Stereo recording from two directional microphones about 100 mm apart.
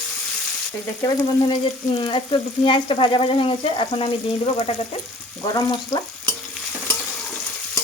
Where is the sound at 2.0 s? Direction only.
60° left (ahead or behind).